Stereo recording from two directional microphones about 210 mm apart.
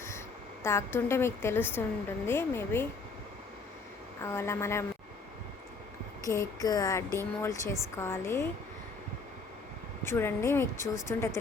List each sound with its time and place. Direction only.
0.6 s a woman's voice: 15° left (ahead or behind)
4.2 s a woman's voice: 10° left (ahead or behind)
6.2 s a woman's voice: 15° left (ahead or behind)
10.0 s a woman's voice: 10° left (ahead or behind)